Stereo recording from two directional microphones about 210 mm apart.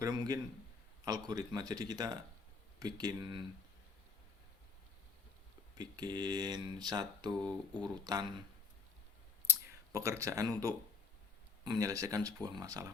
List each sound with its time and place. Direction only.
0.0 s a sound: 15° right (ahead or behind)
1.0 s speech: 20° right (ahead or behind)
5.7 s speech: 20° right (ahead or behind)
9.5 s speech: 15° right (ahead or behind)